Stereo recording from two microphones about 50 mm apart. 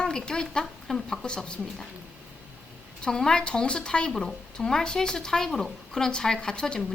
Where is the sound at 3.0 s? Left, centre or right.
Centre.